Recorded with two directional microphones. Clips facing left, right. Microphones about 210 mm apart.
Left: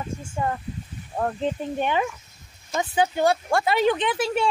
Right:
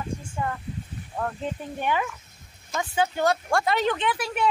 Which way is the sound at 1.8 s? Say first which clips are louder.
Even; 25° left (ahead or behind).